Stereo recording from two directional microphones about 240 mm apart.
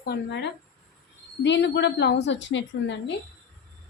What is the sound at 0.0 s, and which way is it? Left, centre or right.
Speech, left.